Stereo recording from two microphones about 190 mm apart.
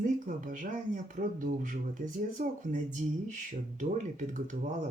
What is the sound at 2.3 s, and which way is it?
Speech, 45° right (ahead or behind).